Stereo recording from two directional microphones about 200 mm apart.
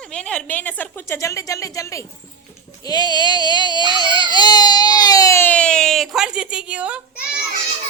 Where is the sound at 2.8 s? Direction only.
20° left (ahead or behind); by 7.0 s 5° right (ahead or behind).